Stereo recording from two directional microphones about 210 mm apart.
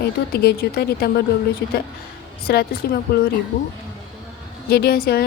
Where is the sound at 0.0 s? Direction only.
50° left (ahead or behind).